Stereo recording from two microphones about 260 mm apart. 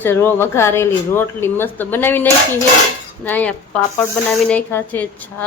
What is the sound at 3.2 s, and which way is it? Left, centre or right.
Speech, centre.